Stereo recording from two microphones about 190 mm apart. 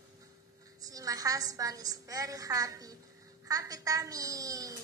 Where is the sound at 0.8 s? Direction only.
20° right (ahead or behind).